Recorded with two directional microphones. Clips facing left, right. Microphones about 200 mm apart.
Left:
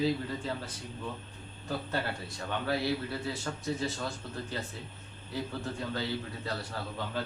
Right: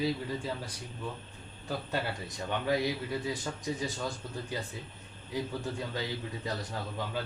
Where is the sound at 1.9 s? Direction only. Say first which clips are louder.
Even; 15° right (ahead or behind).